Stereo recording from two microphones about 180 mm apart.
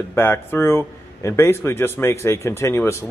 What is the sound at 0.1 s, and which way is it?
Speech, 10° left (ahead or behind).